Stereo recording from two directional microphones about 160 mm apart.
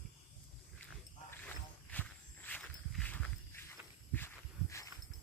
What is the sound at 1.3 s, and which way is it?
Walk, 10° left (ahead or behind).